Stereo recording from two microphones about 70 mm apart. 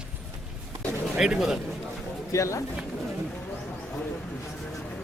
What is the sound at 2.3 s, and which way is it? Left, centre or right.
Speech, left.